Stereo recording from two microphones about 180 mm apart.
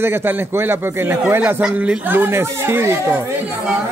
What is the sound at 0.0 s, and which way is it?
Speech, 10° right (ahead or behind).